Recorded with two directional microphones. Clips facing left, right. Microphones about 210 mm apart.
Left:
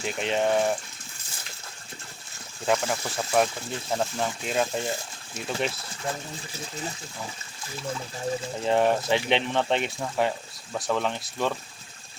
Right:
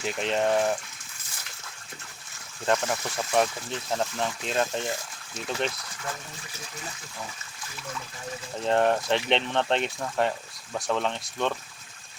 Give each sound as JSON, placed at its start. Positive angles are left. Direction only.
{"t": 0.0, "sound": "speech", "side_deg": 0}
{"t": 2.6, "sound": "speech", "side_deg": 0}
{"t": 5.7, "sound": "speech", "side_deg": 25}
{"t": 8.6, "sound": "speech", "side_deg": 5}